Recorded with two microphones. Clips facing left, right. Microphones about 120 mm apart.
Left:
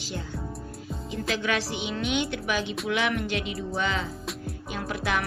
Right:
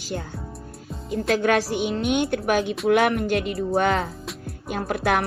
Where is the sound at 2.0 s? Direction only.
55° right (ahead or behind).